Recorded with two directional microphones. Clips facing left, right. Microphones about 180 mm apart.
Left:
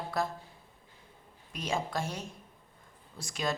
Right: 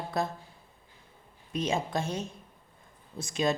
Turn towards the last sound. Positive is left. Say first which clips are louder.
# right 5 dB
turn(degrees=-20)  # may be behind; listen again after turning